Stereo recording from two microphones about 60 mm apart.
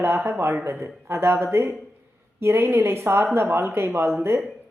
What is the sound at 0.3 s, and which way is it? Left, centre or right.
A woman's voice, right.